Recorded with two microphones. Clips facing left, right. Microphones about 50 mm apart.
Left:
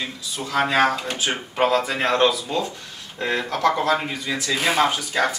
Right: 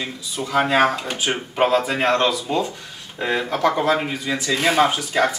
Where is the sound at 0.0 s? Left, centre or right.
Centre.